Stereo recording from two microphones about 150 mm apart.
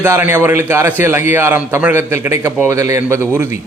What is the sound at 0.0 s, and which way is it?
A man's voice, 15° right (ahead or behind).